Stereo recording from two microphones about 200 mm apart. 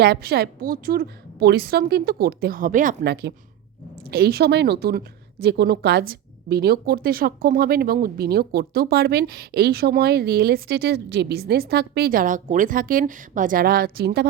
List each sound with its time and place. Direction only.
0.0 s a woman's voice: 50° right (ahead or behind)